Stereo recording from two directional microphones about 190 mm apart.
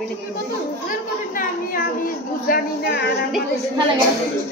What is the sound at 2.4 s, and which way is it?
Speech, 50° left (ahead or behind).